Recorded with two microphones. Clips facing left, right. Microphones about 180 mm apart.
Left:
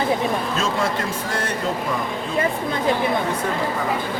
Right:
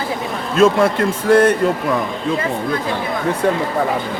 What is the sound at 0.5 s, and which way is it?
Speech, 55° right (ahead or behind).